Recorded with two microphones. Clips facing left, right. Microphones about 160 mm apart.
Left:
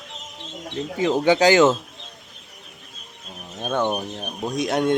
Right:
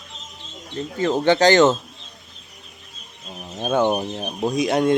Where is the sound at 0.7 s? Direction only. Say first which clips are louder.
Even; 10° left (ahead or behind).